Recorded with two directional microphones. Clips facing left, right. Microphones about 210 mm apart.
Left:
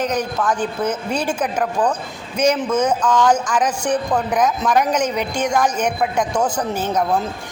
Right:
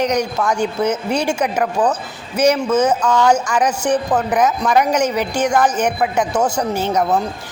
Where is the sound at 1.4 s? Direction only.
10° right (ahead or behind).